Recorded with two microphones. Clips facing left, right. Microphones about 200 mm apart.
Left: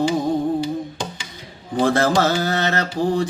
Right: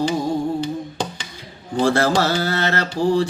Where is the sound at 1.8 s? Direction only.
20° left (ahead or behind).